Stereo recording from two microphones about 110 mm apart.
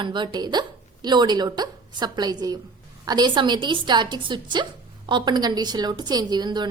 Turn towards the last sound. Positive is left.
turn(degrees=-40)  # may be behind; listen again after turning